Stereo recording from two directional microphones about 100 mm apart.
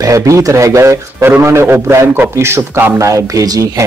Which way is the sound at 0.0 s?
35° right (ahead or behind).